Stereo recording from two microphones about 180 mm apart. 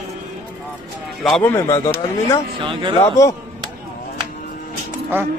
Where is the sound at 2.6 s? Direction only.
25° right (ahead or behind).